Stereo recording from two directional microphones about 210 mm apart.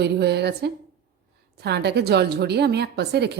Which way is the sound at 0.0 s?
50° right (ahead or behind).